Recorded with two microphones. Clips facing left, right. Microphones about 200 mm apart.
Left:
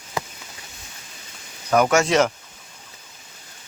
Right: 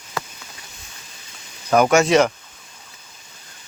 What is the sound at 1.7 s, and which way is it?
Speech, 30° right (ahead or behind).